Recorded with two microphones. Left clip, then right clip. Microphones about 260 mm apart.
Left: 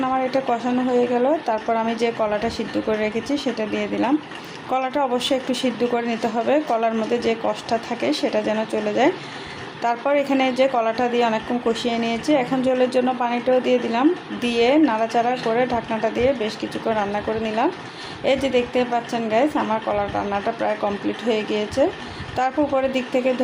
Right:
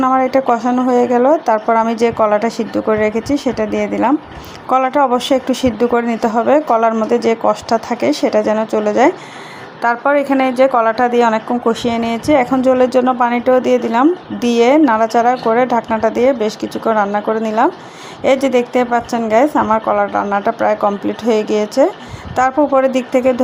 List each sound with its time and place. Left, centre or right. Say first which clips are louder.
0.0 s a woman's voice: right 8 dB; right